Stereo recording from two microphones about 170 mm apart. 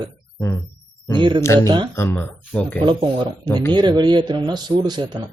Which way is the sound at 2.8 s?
25° right (ahead or behind).